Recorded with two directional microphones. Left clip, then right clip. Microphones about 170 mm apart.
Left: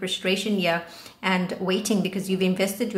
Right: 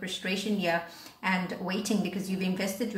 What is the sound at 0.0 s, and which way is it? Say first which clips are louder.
A woman's voice: left 7 dB; 40° left (ahead or behind).